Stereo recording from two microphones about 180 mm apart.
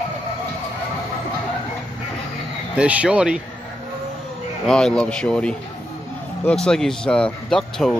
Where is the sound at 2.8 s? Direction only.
5° right (ahead or behind).